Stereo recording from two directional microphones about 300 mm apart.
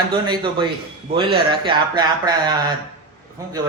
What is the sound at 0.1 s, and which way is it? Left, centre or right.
Speech, centre.